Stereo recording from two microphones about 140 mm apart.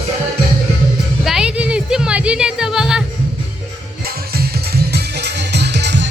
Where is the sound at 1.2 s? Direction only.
5° right (ahead or behind).